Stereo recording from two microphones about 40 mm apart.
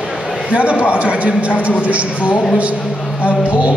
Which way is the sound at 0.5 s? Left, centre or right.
Right.